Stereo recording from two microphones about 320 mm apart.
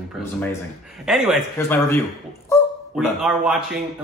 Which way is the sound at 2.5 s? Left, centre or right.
Centre.